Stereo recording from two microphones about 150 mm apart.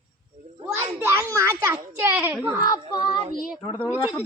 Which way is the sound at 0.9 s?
15° right (ahead or behind).